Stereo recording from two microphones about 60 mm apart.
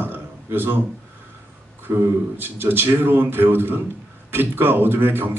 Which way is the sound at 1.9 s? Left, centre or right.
Right.